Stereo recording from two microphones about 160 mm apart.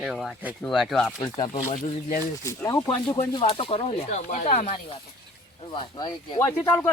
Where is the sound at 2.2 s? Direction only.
20° left (ahead or behind).